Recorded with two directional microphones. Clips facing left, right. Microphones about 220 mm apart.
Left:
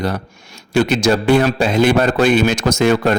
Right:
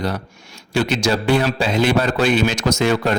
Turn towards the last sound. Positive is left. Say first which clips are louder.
# left 3 dB
turn(degrees=50)  # may be behind; listen again after turning